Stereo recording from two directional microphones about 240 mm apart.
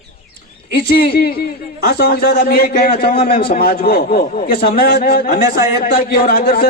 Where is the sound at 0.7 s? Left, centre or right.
Left.